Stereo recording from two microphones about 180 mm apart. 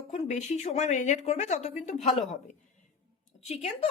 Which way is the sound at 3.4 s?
35° left (ahead or behind).